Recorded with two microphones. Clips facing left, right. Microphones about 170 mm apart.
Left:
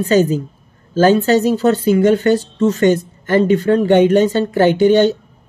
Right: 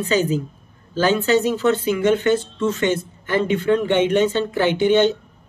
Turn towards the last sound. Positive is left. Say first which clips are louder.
# left 5 dB
turn(degrees=40)  # may be behind; listen again after turning